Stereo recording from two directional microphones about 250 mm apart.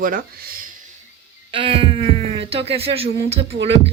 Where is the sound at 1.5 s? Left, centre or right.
Right.